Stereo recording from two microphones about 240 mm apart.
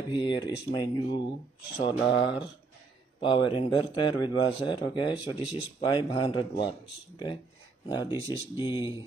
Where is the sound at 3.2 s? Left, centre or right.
Left.